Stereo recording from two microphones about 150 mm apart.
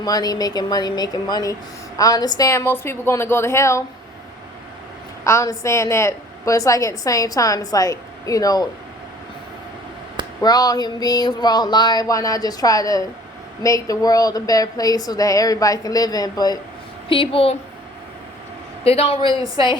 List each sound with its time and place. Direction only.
0.0 s a woman's voice: 25° left (ahead or behind)
5.2 s a woman's voice: 20° left (ahead or behind)
10.4 s a woman's voice: 25° left (ahead or behind)
17.1 s a woman's voice: 35° left (ahead or behind)
18.9 s a woman's voice: 40° left (ahead or behind)